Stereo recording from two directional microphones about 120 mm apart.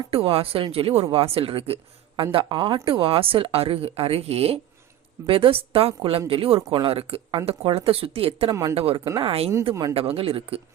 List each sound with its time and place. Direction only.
0.1 s speech: 55° right (ahead or behind)
8.4 s speech: 30° right (ahead or behind)
8.7 s speech: 55° right (ahead or behind)